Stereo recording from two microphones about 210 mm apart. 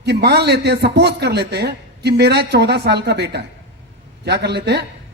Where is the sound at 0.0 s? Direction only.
55° right (ahead or behind).